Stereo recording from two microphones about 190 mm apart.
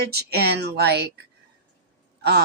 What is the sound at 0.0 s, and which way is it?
Speech, 55° right (ahead or behind).